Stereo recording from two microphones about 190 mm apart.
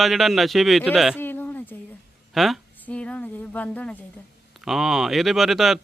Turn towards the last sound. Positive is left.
turn(degrees=0)  # may be behind; listen again after turning